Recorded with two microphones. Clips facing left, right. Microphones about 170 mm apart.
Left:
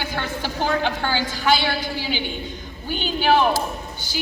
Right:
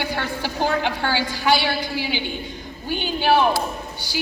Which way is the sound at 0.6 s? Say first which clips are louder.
Even; 15° right (ahead or behind).